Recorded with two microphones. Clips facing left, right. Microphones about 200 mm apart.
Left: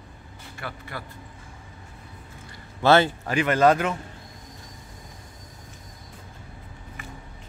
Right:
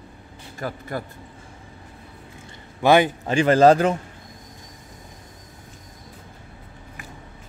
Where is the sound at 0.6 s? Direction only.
40° right (ahead or behind).